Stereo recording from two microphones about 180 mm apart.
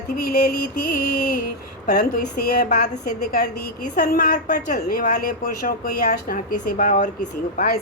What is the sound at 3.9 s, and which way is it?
Speech, 55° left (ahead or behind).